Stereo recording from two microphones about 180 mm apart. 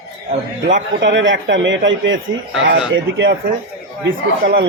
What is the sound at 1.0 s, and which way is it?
A man's voice, 90° right.